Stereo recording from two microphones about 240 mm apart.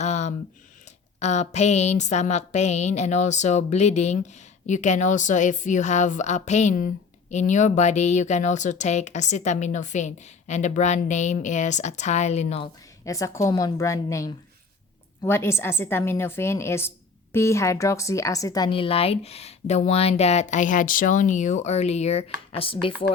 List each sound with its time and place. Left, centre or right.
0.0 s a sound: left
1.2 s a woman's voice: left
13.1 s a woman's voice: centre